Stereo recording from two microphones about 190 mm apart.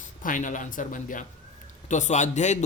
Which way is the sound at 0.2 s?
45° left (ahead or behind).